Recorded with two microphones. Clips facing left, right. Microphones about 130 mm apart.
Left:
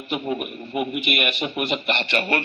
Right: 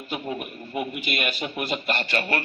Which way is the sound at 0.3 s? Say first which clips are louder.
Left 4 dB; 20° left (ahead or behind).